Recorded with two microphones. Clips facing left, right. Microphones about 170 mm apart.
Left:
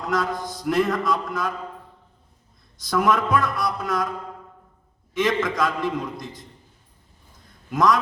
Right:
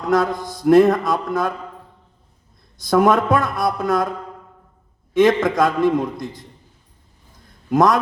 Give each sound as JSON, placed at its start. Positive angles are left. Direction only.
{"t": 0.1, "sound": "a man's voice", "side_deg": -50}
{"t": 2.8, "sound": "a man's voice", "side_deg": -50}
{"t": 5.1, "sound": "a man's voice", "side_deg": -50}
{"t": 7.7, "sound": "a man's voice", "side_deg": -50}